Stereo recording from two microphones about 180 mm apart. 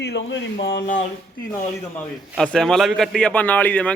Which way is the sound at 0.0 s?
70° left (ahead or behind).